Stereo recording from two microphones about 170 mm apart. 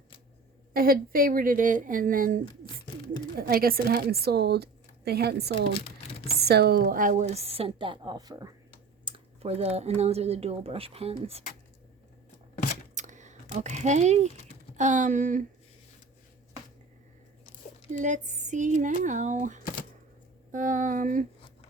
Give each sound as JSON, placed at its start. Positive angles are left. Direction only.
{"t": 0.7, "sound": "a woman's voice", "side_deg": -60}
{"t": 9.0, "sound": "speech", "side_deg": -35}
{"t": 12.9, "sound": "a sound", "side_deg": -45}
{"t": 14.8, "sound": "speech", "side_deg": -45}
{"t": 17.9, "sound": "speech", "side_deg": -45}